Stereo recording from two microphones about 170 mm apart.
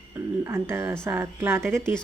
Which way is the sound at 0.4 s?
15° right (ahead or behind).